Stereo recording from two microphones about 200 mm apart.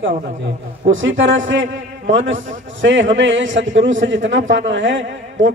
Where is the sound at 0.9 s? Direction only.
70° right (ahead or behind).